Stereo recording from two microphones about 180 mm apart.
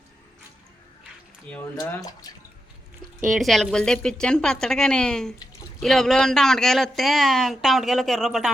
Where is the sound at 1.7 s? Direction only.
20° left (ahead or behind).